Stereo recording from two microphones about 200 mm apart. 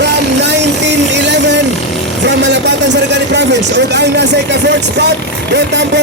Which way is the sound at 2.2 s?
60° right (ahead or behind).